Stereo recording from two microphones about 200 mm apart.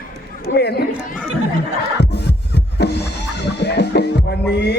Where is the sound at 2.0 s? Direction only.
60° left (ahead or behind).